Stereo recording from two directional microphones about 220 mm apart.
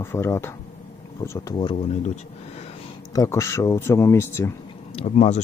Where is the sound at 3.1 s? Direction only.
15° left (ahead or behind).